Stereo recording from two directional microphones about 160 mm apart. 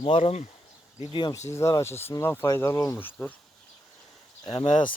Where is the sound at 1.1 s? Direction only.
25° left (ahead or behind); by 3.3 s 10° left (ahead or behind).